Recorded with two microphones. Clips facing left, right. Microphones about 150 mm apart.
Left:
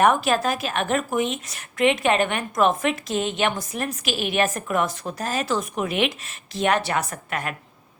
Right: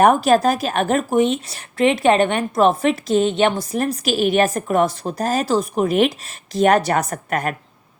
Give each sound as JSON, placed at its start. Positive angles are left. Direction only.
{"t": 0.0, "sound": "speech", "side_deg": -40}